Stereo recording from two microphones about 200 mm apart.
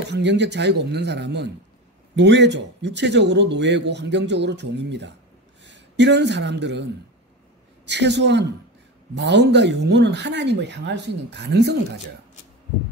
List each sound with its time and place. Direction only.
0.1 s a man's voice: 60° right (ahead or behind)
7.9 s a man's voice: 60° right (ahead or behind)